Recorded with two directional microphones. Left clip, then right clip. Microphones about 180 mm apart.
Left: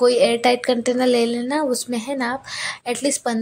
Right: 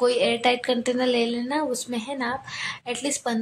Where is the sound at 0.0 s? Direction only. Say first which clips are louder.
Left 5 dB; 20° left (ahead or behind).